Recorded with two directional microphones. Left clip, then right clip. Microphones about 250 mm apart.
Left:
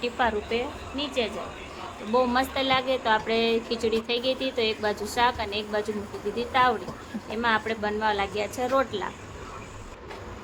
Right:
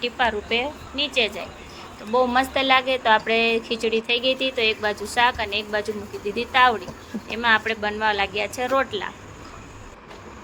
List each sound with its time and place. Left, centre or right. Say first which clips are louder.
0.0 s speech: right 3 dB; centre